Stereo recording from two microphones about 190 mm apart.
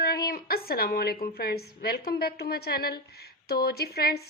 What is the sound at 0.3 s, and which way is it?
A woman's voice, 50° left (ahead or behind).